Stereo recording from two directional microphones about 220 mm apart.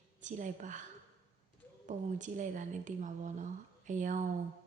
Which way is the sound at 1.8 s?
35° right (ahead or behind).